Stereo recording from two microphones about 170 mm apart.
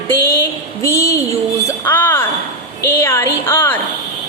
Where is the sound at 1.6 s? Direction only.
10° left (ahead or behind).